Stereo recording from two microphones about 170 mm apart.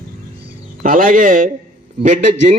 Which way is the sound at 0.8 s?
55° right (ahead or behind).